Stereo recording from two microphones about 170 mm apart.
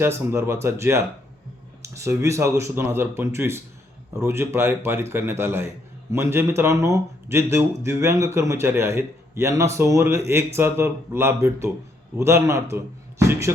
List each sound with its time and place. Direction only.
0.0 s a man's voice: 15° right (ahead or behind)